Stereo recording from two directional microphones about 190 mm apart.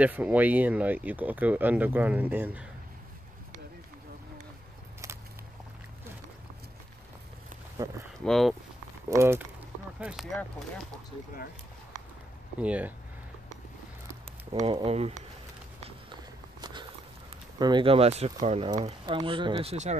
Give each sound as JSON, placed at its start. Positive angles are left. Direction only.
{"t": 0.0, "sound": "speech", "side_deg": -5}
{"t": 5.0, "sound": "walk", "side_deg": -15}
{"t": 7.8, "sound": "speech", "side_deg": -20}
{"t": 8.2, "sound": "speech", "side_deg": 0}
{"t": 9.1, "sound": "speech", "side_deg": -15}
{"t": 12.5, "sound": "speech", "side_deg": -5}
{"t": 14.5, "sound": "speech", "side_deg": -25}
{"t": 17.6, "sound": "speech", "side_deg": -25}